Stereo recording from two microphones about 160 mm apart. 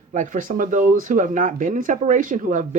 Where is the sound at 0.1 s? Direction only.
55° right (ahead or behind).